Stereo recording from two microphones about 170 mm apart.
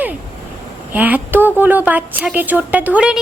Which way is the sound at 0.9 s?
10° right (ahead or behind).